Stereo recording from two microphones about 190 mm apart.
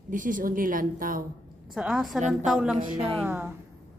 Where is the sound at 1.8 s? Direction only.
Centre (ahead or behind).